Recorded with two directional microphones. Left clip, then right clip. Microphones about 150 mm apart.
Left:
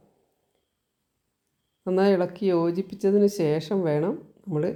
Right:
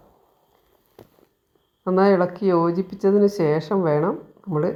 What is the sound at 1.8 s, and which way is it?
Speech, 25° left (ahead or behind).